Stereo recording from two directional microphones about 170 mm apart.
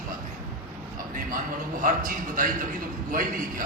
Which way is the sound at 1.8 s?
55° right (ahead or behind).